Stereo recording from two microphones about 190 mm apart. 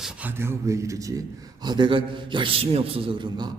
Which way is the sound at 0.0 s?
10° right (ahead or behind).